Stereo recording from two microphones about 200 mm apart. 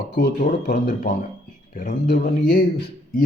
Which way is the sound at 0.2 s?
40° left (ahead or behind).